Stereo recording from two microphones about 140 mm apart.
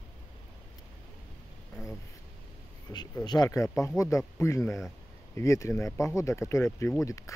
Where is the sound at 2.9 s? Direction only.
20° left (ahead or behind).